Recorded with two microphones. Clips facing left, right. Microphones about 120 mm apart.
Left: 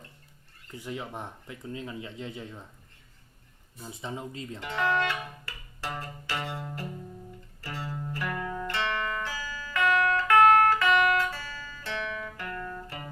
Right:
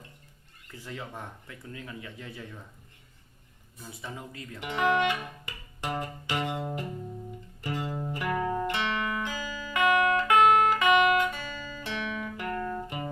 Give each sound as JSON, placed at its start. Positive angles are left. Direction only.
{"t": 0.7, "sound": "speech", "side_deg": 15}
{"t": 3.8, "sound": "speech", "side_deg": 25}
{"t": 4.6, "sound": "music", "side_deg": -20}
{"t": 7.6, "sound": "music", "side_deg": -20}
{"t": 12.5, "sound": "guitar", "side_deg": -30}